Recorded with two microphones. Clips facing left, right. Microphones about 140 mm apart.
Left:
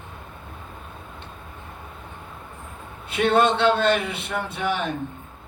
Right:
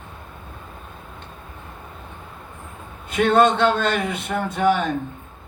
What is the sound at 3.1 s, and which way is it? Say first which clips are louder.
A man's voice: right 3 dB; 45° right (ahead or behind).